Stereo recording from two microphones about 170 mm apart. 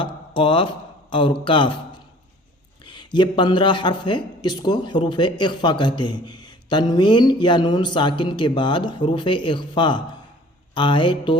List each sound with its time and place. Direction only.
0.0 s speech: 30° left (ahead or behind)
2.8 s a man's voice: 25° left (ahead or behind)